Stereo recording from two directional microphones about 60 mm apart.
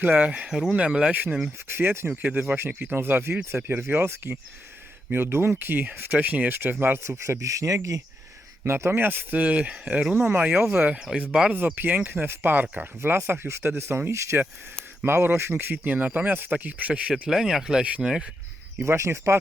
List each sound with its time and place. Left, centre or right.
0.0 s speech: right
1.7 s speech: right
2.2 s speech: right
7.2 s speech: right
8.6 s speech: right
10.9 s speech: centre
11.5 s speech: right
15.0 s speech: right
15.9 s speech: right
18.9 s speech: right